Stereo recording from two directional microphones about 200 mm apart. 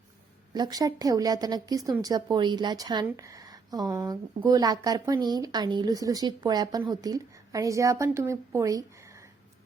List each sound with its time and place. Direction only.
0.5 s speech: 20° right (ahead or behind)